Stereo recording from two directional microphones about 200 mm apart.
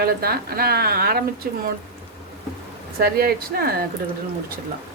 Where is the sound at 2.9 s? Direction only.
50° right (ahead or behind).